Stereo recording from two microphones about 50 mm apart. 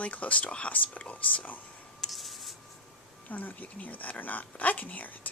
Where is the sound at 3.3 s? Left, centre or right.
Left.